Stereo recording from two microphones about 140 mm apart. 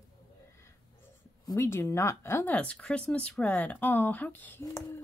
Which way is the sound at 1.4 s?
20° left (ahead or behind).